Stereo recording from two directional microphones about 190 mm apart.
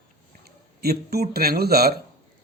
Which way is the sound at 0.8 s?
55° right (ahead or behind).